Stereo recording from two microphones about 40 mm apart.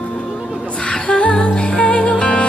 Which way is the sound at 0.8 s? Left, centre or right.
Left.